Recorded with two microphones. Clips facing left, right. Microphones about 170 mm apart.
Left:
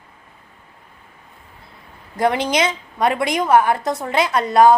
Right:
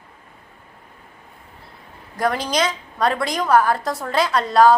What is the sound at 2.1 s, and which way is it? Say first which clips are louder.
A woman's voice: left 3 dB; 25° left (ahead or behind).